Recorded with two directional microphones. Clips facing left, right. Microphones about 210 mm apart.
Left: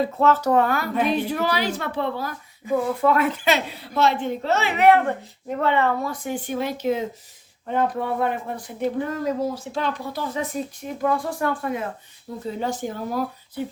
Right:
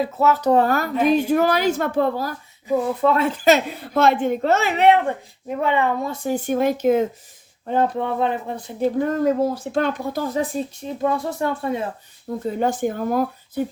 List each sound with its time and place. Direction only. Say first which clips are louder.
0.0 s speech: right 1 dB; 10° right (ahead or behind)
0.5 s a woman's voice: right 2 dB; 40° right (ahead or behind)
3.0 s speech: right 1 dB; 25° right (ahead or behind)
3.4 s a woman's voice: right 6 dB; 45° right (ahead or behind)
4.8 s speech: left 2 dB; 20° right (ahead or behind)
6.2 s a woman's voice: right 10 dB; 45° right (ahead or behind)
7.7 s speech: right 2 dB; 25° right (ahead or behind)
9.0 s a woman's voice: right 8 dB; 50° right (ahead or behind)
10.4 s speech: right 3 dB; 30° right (ahead or behind)
12.5 s a woman's voice: right 6 dB; 55° right (ahead or behind)